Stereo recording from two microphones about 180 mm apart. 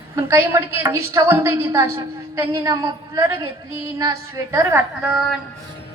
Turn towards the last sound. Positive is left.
turn(degrees=-10)  # may be behind; listen again after turning